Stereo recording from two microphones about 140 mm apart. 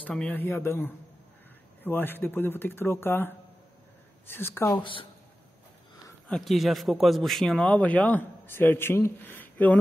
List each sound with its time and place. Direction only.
0.0 s a man's voice: 10° left (ahead or behind)
6.2 s a man's voice: 5° left (ahead or behind)